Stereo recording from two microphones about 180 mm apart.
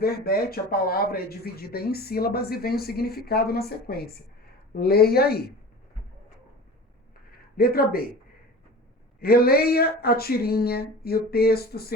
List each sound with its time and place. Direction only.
0.0 s speech: 55° left (ahead or behind)
7.3 s a sound: 55° left (ahead or behind)
9.2 s speech: 55° left (ahead or behind)